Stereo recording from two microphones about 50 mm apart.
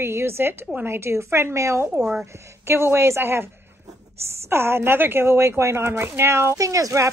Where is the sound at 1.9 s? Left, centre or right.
Centre.